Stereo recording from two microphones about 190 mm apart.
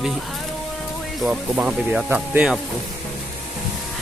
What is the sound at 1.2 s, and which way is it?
Speech, 5° right (ahead or behind).